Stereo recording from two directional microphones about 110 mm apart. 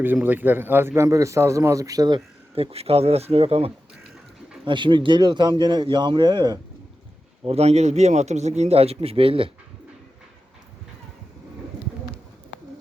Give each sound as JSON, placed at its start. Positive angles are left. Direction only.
{"t": 0.0, "sound": "a man's voice", "side_deg": -15}
{"t": 2.6, "sound": "speech", "side_deg": -65}
{"t": 4.6, "sound": "speech", "side_deg": -45}
{"t": 7.4, "sound": "a man's voice", "side_deg": -70}